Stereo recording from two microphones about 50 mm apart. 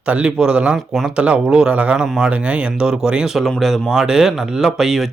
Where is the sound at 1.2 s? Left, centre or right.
Right.